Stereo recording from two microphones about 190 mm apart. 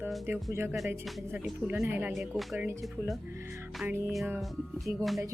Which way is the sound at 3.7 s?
5° right (ahead or behind).